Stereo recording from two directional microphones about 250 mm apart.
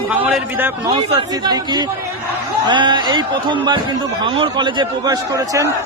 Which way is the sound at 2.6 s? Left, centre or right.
Centre.